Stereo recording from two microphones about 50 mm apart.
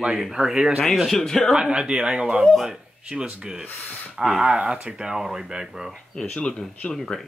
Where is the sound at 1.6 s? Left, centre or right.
Centre.